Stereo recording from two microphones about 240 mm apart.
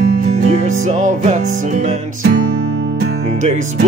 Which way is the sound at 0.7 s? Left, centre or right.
Right.